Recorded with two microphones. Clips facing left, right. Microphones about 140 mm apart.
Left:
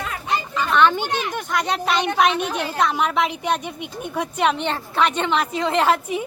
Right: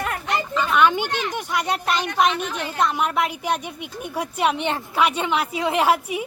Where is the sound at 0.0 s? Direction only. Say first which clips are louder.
Even; 60° right (ahead or behind).